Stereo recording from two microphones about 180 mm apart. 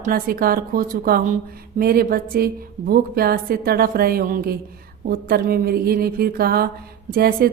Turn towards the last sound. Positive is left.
turn(degrees=-55)  # may be behind; listen again after turning